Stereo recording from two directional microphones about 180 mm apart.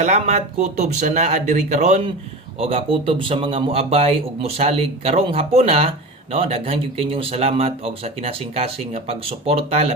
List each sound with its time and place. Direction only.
0.0 s speech: 40° right (ahead or behind)